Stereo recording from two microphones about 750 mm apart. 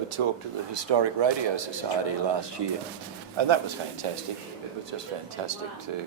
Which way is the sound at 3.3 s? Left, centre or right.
Right.